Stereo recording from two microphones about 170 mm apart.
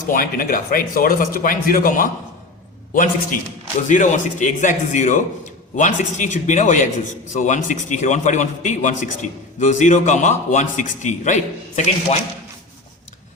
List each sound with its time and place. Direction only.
0.1 s a man's voice: 55° left (ahead or behind)